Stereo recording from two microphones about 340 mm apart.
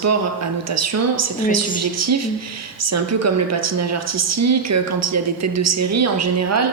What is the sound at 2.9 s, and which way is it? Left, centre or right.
A woman's voice, right.